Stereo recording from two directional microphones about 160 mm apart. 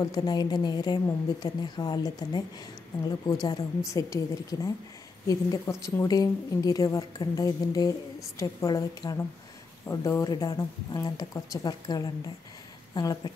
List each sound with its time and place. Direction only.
0.0 s a woman's voice: 25° left (ahead or behind)
3.4 s a woman's voice: 20° left (ahead or behind)